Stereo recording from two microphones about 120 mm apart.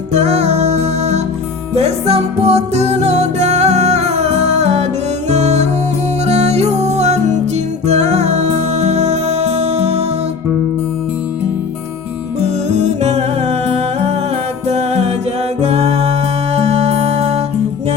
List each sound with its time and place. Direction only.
0.1 s music: 65° right (ahead or behind)
12.6 s music: 65° right (ahead or behind)